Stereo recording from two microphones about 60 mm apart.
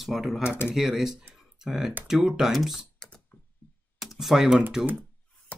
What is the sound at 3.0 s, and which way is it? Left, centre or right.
Typing, centre.